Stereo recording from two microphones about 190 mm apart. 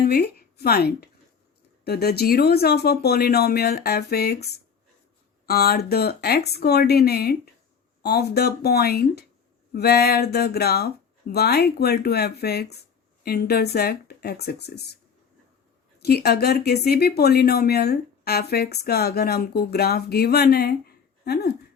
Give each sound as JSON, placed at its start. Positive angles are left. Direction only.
{"t": 0.0, "sound": "speech", "side_deg": 55}
{"t": 16.0, "sound": "speech", "side_deg": 55}